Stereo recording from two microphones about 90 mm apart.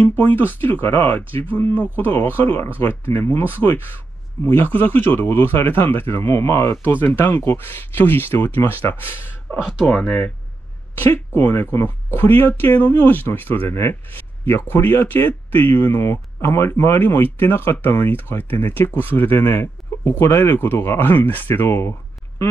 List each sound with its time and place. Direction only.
0.0 s speech: 20° left (ahead or behind)
11.0 s speech: 25° left (ahead or behind)